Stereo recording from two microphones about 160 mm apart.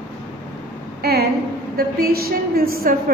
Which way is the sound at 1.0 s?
90° right.